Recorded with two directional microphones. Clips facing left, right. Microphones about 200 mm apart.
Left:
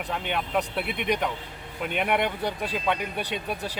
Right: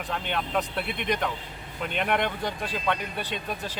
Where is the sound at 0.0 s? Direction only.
10° left (ahead or behind).